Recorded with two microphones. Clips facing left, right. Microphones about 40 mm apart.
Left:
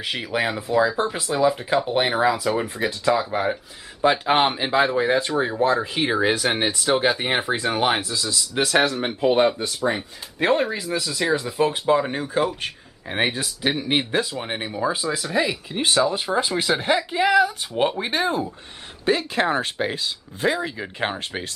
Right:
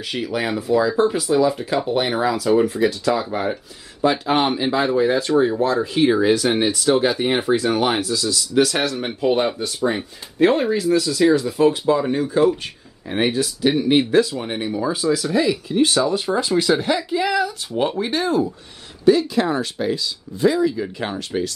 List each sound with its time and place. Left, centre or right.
0.0 s speech: centre
4.0 s speech: left
11.9 s speech: left
12.2 s speech: centre
16.8 s speech: left
19.0 s speech: left
20.7 s speech: left